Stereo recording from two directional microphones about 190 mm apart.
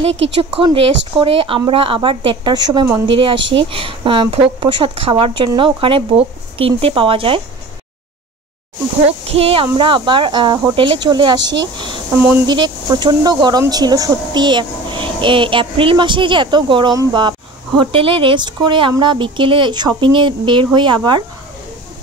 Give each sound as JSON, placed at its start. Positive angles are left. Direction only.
{"t": 0.1, "sound": "speech", "side_deg": -75}
{"t": 0.4, "sound": "speech", "side_deg": -30}
{"t": 3.3, "sound": "speech", "side_deg": -75}
{"t": 3.7, "sound": "speech", "side_deg": -25}
{"t": 9.3, "sound": "speech", "side_deg": -30}
{"t": 11.4, "sound": "speech", "side_deg": -65}
{"t": 12.4, "sound": "speech", "side_deg": -25}